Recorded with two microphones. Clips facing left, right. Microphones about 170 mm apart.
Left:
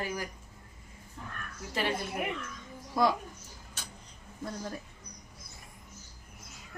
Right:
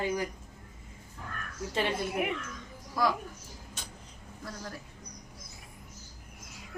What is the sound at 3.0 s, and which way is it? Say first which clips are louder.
Speech: left 2 dB; 25° left (ahead or behind).